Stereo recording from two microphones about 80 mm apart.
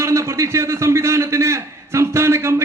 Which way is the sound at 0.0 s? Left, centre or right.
Right.